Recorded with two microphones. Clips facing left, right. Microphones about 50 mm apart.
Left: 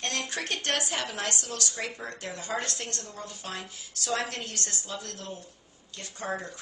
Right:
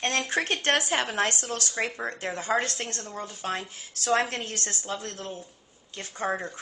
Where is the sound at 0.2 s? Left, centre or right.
Right.